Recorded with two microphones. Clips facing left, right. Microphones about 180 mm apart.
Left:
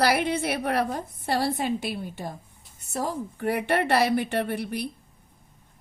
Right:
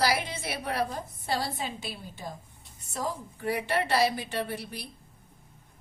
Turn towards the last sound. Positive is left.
turn(degrees=60)  # may be behind; listen again after turning